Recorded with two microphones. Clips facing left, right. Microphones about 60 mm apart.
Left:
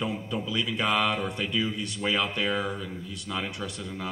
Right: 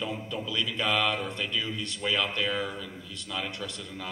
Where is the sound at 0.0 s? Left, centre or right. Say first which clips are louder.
Left 3 dB; centre.